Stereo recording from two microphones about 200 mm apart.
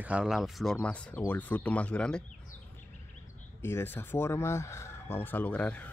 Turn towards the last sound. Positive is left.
turn(degrees=5)  # may be behind; listen again after turning